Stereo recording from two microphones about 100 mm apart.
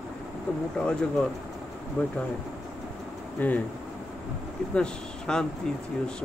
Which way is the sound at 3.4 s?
15° left (ahead or behind).